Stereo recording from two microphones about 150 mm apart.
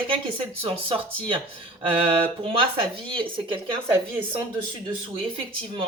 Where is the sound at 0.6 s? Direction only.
40° right (ahead or behind).